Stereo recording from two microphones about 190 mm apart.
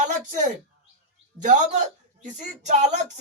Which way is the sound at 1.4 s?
40° right (ahead or behind).